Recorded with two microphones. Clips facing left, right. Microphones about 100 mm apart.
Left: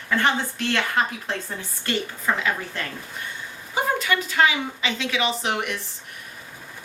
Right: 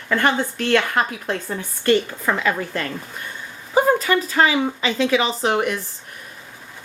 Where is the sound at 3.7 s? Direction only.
35° right (ahead or behind).